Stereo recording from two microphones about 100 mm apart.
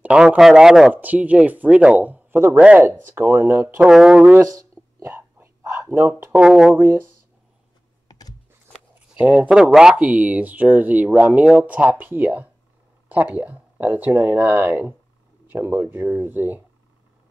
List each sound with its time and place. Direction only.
0.0 s speech: 10° right (ahead or behind)
0.9 s a man's voice: 15° right (ahead or behind)
3.9 s a man's voice: 5° right (ahead or behind)
4.8 s whispering: 15° right (ahead or behind)
5.1 s a sound: 25° right (ahead or behind)
6.0 s speech: 30° right (ahead or behind)
6.3 s a man's voice: 5° right (ahead or behind)
8.1 s a sound: 40° left (ahead or behind)
9.1 s a man's voice: 15° right (ahead or behind)